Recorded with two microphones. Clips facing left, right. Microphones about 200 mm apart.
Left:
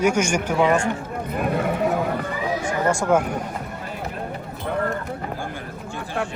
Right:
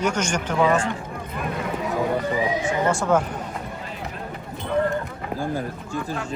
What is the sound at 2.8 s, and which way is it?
Speech, 10° left (ahead or behind).